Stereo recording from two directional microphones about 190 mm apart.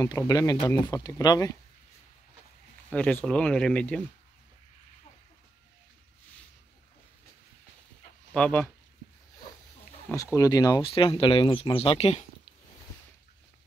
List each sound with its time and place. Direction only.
0.0 s speech: 20° left (ahead or behind)
2.9 s speech: 10° left (ahead or behind)
8.3 s speech: 5° left (ahead or behind)
10.0 s speech: 15° left (ahead or behind); by 12.3 s 30° left (ahead or behind)